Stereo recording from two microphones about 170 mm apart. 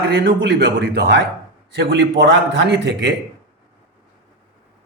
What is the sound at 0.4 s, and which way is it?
Speech, 90° right.